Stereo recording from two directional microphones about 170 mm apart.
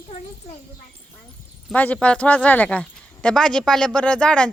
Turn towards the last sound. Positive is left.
turn(degrees=5)  # may be behind; listen again after turning